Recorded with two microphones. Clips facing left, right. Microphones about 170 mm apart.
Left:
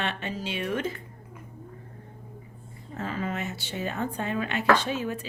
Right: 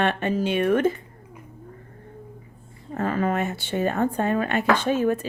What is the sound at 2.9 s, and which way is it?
A woman's voice, 55° right (ahead or behind).